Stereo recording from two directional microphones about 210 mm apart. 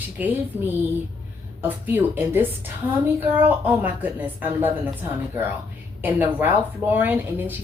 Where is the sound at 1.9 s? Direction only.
10° right (ahead or behind).